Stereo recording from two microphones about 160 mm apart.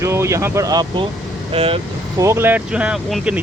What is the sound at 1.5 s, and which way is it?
Speech, 35° right (ahead or behind).